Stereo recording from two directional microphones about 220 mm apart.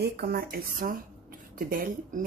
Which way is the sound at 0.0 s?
45° right (ahead or behind).